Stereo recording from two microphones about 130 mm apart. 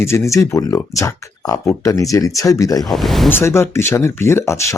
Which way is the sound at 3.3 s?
20° left (ahead or behind).